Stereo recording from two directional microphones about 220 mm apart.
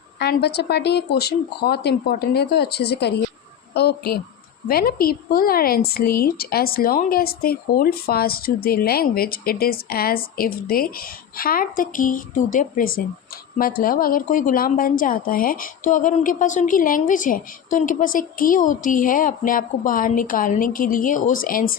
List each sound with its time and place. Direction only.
0.2 s a woman's voice: 50° left (ahead or behind)